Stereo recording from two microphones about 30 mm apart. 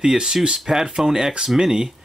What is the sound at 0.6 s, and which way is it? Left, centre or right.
Speech, centre.